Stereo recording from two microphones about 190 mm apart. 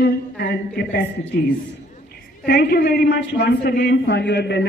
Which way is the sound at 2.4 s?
55° left (ahead or behind).